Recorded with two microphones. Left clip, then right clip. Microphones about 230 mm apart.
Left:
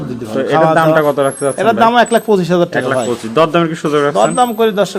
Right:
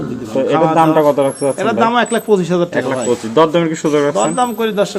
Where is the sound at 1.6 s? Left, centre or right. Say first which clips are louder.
Left 6 dB; left.